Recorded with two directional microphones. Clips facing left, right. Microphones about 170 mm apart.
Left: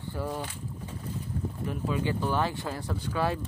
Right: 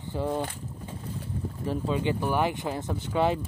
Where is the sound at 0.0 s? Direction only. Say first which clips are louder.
Right 4 dB; 20° right (ahead or behind).